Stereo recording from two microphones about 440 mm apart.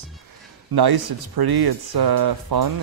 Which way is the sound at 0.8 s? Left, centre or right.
Right.